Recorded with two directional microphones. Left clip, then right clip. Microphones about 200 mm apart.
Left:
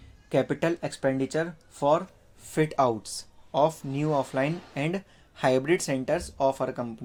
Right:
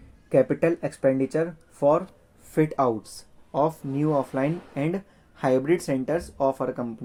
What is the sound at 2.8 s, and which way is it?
Speech, 25° left (ahead or behind).